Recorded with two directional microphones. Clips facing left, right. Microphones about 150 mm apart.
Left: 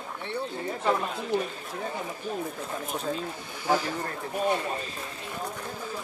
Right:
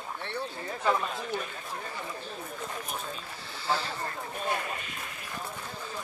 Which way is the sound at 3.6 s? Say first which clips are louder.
Left 5 dB; 15° left (ahead or behind).